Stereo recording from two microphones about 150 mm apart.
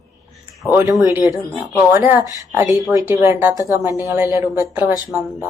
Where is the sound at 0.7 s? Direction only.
15° right (ahead or behind).